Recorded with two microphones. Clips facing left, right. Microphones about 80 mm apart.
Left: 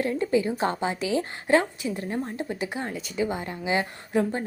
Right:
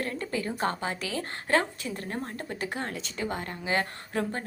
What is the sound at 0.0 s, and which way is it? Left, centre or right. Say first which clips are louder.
A woman's voice: left 8 dB; centre.